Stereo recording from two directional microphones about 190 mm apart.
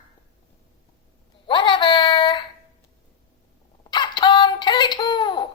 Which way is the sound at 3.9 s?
25° left (ahead or behind).